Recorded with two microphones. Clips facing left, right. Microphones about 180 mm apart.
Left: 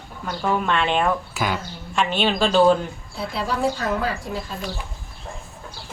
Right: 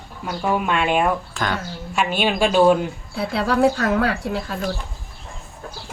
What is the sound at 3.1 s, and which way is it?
Speech, 65° right (ahead or behind).